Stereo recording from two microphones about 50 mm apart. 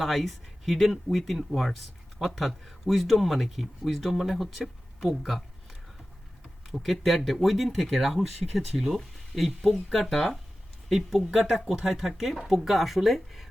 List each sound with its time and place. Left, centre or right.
0.0 s speech: centre
6.7 s speech: centre